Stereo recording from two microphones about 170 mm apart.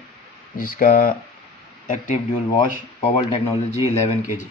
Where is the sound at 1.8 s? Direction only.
50° left (ahead or behind).